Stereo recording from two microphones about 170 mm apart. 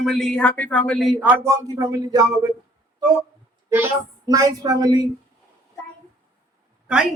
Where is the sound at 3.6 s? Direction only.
15° right (ahead or behind).